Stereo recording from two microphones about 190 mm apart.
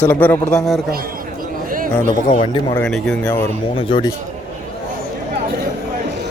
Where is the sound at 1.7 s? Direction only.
45° right (ahead or behind).